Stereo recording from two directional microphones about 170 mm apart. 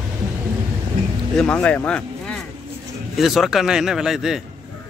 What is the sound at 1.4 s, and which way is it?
Speech, 5° left (ahead or behind).